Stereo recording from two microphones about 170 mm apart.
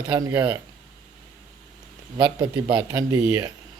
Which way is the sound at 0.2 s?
10° right (ahead or behind).